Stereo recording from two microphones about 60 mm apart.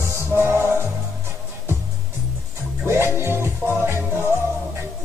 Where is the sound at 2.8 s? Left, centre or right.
Right.